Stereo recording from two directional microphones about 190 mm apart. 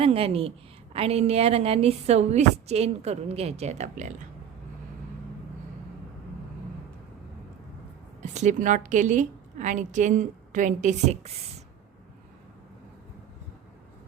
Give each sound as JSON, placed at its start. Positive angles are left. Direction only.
{"t": 0.0, "sound": "a woman's voice", "side_deg": -30}
{"t": 8.2, "sound": "a woman's voice", "side_deg": -40}